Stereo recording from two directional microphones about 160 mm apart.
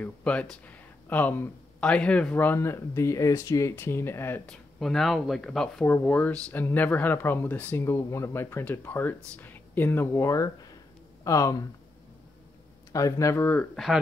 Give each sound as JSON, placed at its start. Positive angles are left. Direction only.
{"t": 0.0, "sound": "speech", "side_deg": 10}
{"t": 4.7, "sound": "speech", "side_deg": 0}
{"t": 12.9, "sound": "speech", "side_deg": 20}